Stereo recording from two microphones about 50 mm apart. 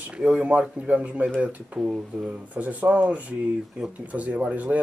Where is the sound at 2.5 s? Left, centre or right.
Right.